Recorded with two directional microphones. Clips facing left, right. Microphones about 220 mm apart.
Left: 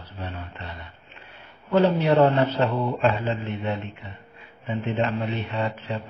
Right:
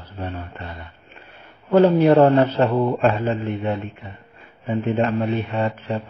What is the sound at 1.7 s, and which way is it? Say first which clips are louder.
A man's voice: right 6 dB; 50° right (ahead or behind).